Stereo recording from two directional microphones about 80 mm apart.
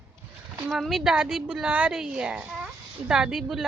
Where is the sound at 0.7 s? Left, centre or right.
Centre.